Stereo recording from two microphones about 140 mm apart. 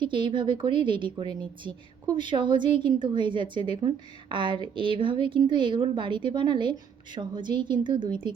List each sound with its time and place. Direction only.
0.0 s a woman's voice: 35° right (ahead or behind)